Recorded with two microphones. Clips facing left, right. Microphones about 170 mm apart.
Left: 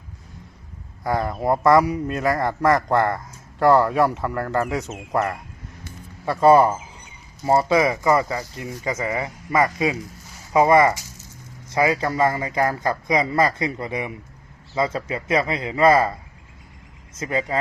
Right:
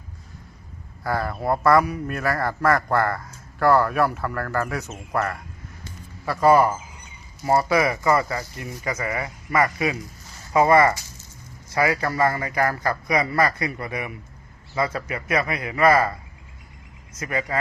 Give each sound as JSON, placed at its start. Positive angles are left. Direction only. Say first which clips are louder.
{"t": 1.0, "sound": "speech", "louder": "left 3 dB", "side_deg": 20}
{"t": 17.2, "sound": "speech", "louder": "left 2 dB", "side_deg": 25}